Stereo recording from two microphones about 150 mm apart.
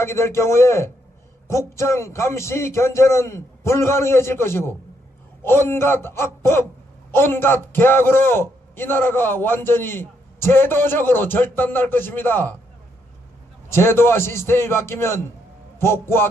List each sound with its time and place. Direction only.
0.0 s a man's voice: 15° left (ahead or behind)
13.7 s a man's voice: 15° left (ahead or behind)